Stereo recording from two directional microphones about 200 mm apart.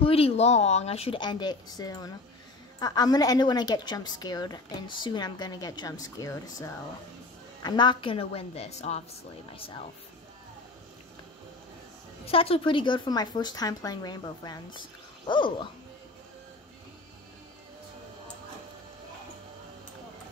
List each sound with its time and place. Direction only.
0.0 s a woman's voice: 30° left (ahead or behind)
12.3 s a woman's voice: 30° left (ahead or behind)